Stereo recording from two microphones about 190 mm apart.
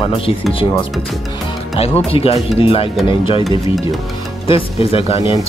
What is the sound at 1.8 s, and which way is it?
Speech, 30° left (ahead or behind).